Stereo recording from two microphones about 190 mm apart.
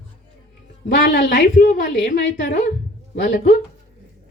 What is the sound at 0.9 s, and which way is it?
A woman's voice, 50° left (ahead or behind).